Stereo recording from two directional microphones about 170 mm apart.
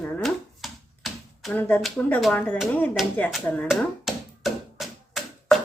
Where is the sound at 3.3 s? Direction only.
Centre (ahead or behind).